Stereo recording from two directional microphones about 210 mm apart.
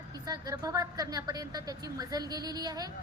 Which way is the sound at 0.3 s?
15° right (ahead or behind).